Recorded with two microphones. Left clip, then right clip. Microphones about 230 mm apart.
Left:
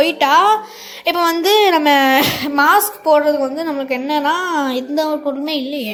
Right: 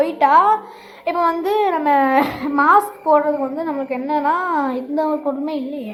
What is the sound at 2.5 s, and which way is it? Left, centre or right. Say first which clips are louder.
Speech: even; left.